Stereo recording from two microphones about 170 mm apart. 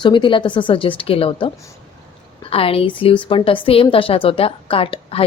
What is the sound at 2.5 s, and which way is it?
A woman's voice, 35° left (ahead or behind).